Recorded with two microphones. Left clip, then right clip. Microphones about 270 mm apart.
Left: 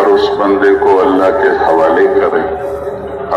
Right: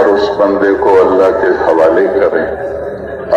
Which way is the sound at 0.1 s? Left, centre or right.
Left.